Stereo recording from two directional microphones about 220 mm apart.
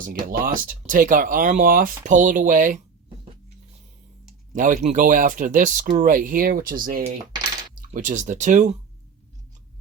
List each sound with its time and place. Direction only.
0.0 s speech: 40° right (ahead or behind)
4.5 s speech: 35° right (ahead or behind)